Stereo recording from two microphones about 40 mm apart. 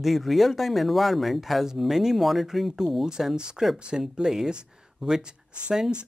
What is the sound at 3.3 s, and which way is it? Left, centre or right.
Speech, right.